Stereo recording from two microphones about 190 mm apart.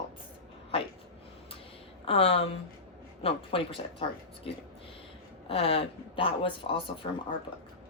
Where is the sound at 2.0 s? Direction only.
30° left (ahead or behind).